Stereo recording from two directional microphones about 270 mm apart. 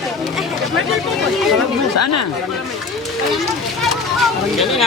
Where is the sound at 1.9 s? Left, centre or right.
Left.